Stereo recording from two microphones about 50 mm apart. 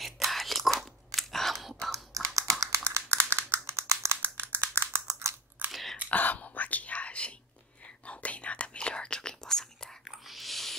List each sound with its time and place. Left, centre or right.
0.0 s whispering: centre
2.1 s typing: right
2.6 s a sound: right
4.2 s typing: right
5.7 s whispering: centre
6.0 s whispering: left; by 10.1 s centre
10.2 s a sound: centre